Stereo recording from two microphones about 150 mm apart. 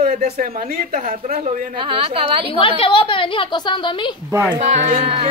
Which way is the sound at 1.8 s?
35° right (ahead or behind).